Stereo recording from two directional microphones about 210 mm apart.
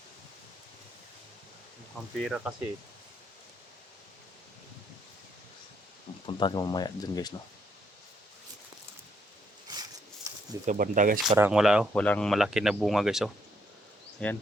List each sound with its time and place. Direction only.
2.2 s speech: centre (ahead or behind)
6.2 s speech: 20° left (ahead or behind)
9.7 s a sound: 20° right (ahead or behind)
10.7 s speech: 40° right (ahead or behind)
11.3 s speech: 10° right (ahead or behind)